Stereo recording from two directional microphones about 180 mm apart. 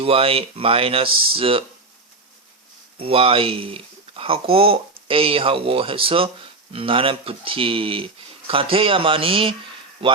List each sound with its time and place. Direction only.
0.0 s speech: 30° right (ahead or behind)
3.0 s speech: 30° right (ahead or behind)